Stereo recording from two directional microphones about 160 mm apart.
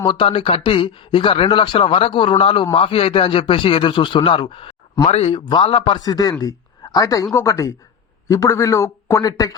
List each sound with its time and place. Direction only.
0.0 s a man's voice: 30° left (ahead or behind)